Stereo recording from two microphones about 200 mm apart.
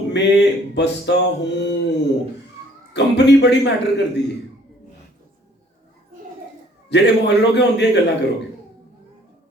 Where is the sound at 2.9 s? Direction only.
60° left (ahead or behind).